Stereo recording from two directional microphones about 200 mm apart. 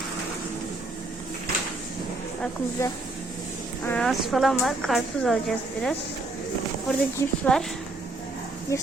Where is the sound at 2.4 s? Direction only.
15° left (ahead or behind).